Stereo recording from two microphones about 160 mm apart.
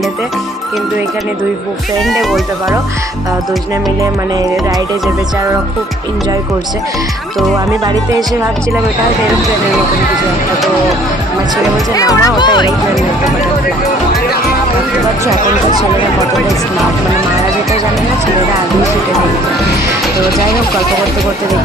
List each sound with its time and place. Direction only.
11.9 s speech: 20° left (ahead or behind)